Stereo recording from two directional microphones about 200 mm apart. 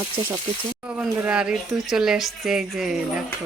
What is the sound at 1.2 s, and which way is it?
Speech, 5° right (ahead or behind).